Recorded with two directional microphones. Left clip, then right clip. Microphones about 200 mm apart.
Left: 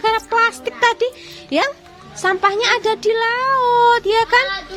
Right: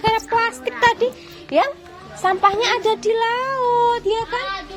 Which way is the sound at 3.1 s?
15° left (ahead or behind).